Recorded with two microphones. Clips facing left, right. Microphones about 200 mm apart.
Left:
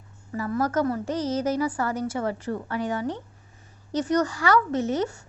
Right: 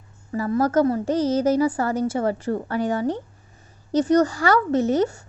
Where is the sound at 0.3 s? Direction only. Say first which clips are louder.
Right 5 dB; 35° right (ahead or behind).